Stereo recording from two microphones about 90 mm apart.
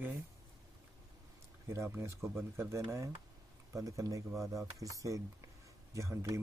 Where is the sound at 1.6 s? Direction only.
30° right (ahead or behind).